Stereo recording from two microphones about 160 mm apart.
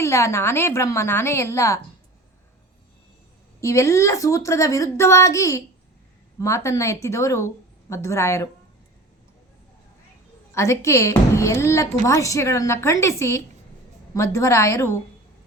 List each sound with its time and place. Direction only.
0.0 s a woman's voice: 20° left (ahead or behind)
3.6 s a woman's voice: 20° left (ahead or behind)
10.5 s a woman's voice: 15° left (ahead or behind)